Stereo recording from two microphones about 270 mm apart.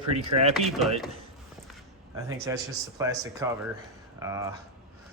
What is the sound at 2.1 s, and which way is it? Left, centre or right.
Speech, centre.